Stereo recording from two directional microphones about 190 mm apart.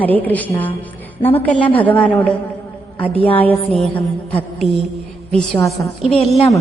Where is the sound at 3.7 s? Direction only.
5° left (ahead or behind).